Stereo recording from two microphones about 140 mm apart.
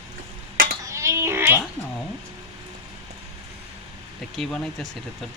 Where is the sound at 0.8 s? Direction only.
20° right (ahead or behind).